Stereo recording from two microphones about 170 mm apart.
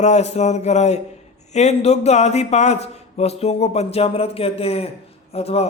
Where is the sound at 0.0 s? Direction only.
40° left (ahead or behind).